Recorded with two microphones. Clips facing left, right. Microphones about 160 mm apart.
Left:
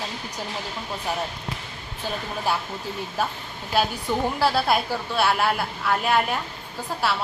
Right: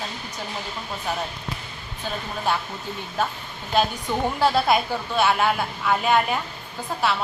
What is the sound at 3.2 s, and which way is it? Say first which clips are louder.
A woman's voice: right 2 dB; 10° left (ahead or behind).